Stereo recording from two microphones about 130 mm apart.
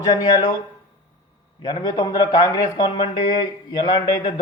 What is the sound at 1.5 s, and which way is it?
Speech, 35° left (ahead or behind).